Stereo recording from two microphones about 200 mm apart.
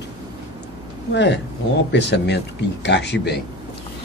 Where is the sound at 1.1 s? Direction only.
60° left (ahead or behind).